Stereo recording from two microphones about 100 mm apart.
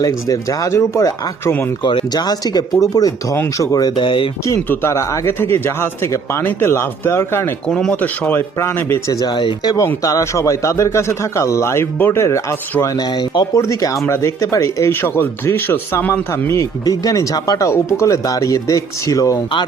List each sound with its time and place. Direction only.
0.0 s speech: 35° left (ahead or behind)
1.8 s speech: 55° left (ahead or behind); by 3.9 s 35° left (ahead or behind)
3.9 s speech: 55° left (ahead or behind)
4.7 s speech: 25° left (ahead or behind)
7.7 s speech: 5° left (ahead or behind)
8.0 s speech: 20° left (ahead or behind)
9.1 s speech: 45° left (ahead or behind)
9.7 s speech: 35° left (ahead or behind)
13.0 s speech: 45° left (ahead or behind)
13.6 s speech: 30° left (ahead or behind)
15.0 s speech: 20° left (ahead or behind)
16.5 s speech: 35° left (ahead or behind)